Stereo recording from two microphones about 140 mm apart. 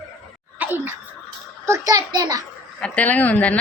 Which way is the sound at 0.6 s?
15° right (ahead or behind).